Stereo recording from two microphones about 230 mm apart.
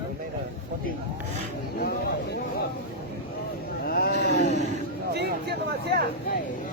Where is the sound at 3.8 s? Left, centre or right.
Left.